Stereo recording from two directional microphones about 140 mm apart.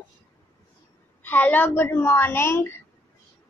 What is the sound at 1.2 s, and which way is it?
A woman's voice, 15° left (ahead or behind).